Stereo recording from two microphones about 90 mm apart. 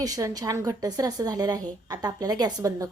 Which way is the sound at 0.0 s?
40° right (ahead or behind).